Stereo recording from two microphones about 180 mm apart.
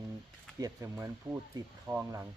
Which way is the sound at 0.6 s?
15° right (ahead or behind).